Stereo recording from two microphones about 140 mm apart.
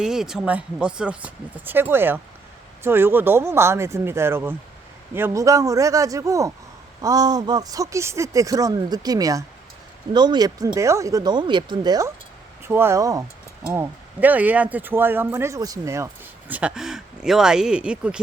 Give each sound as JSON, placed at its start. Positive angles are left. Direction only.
{"t": 0.0, "sound": "speech", "side_deg": -5}
{"t": 13.7, "sound": "speech", "side_deg": -10}
{"t": 16.5, "sound": "speech", "side_deg": -10}